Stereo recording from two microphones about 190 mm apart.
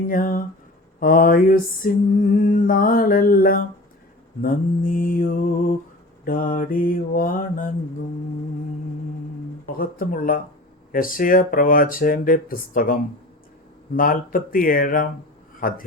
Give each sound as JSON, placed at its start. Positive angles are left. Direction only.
{"t": 0.1, "sound": "mantra", "side_deg": 45}
{"t": 9.6, "sound": "mantra", "side_deg": 50}